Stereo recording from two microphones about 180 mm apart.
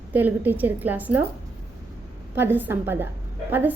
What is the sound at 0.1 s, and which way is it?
Speech, 10° right (ahead or behind).